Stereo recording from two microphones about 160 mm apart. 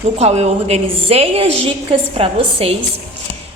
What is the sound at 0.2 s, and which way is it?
A woman's voice, 40° right (ahead or behind).